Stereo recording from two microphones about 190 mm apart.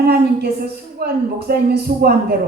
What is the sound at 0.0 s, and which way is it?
A woman's voice, 55° right (ahead or behind).